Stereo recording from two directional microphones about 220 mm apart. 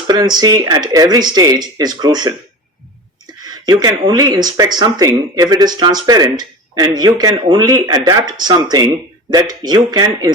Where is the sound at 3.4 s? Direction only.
20° right (ahead or behind).